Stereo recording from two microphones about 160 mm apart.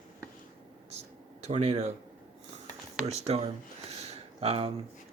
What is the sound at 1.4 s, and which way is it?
Speech, 45° right (ahead or behind).